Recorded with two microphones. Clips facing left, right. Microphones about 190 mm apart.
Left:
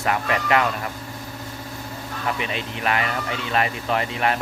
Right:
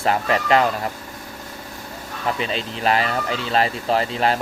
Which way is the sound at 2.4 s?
30° right (ahead or behind).